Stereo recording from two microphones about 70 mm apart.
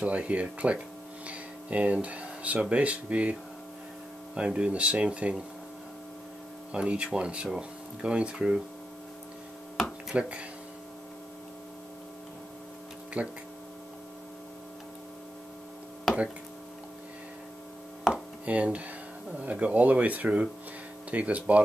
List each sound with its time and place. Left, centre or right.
0.0 s speech: centre
4.4 s speech: centre
6.7 s speech: centre
10.1 s speech: centre
13.2 s speech: centre
18.1 s chopping: centre
19.3 s speech: centre